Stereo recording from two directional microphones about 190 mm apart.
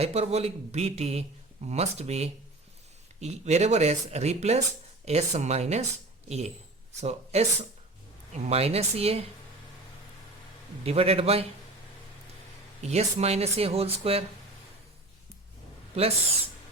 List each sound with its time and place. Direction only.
0.0 s speech: 35° right (ahead or behind)
10.8 s speech: 30° right (ahead or behind)
12.8 s speech: 35° right (ahead or behind)